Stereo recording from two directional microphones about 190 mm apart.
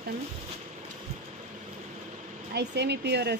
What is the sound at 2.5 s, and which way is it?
Speech, 65° right (ahead or behind).